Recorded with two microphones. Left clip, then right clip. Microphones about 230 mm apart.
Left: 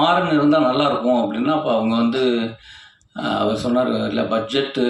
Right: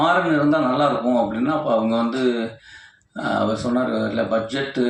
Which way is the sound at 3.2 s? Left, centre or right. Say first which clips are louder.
Left 1 dB; left.